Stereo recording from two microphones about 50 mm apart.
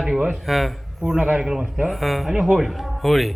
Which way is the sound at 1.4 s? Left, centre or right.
Centre.